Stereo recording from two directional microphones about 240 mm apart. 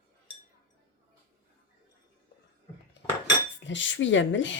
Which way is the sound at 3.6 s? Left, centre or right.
Left.